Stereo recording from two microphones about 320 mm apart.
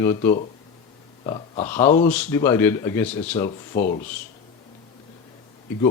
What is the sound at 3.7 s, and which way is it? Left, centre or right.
Speech, left.